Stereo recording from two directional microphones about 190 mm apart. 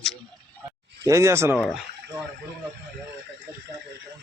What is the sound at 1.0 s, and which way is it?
Speech, 15° right (ahead or behind).